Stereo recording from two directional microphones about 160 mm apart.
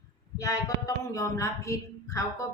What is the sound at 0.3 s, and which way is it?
Speech, 20° left (ahead or behind).